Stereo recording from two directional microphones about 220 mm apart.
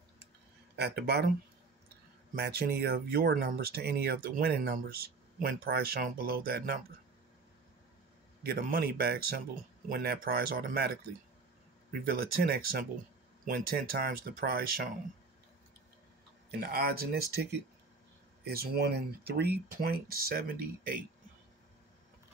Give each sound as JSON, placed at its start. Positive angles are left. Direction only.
{"t": 0.7, "sound": "speech", "side_deg": -45}
{"t": 2.3, "sound": "speech", "side_deg": -45}
{"t": 8.4, "sound": "speech", "side_deg": -45}
{"t": 11.9, "sound": "speech", "side_deg": -40}
{"t": 16.5, "sound": "speech", "side_deg": -45}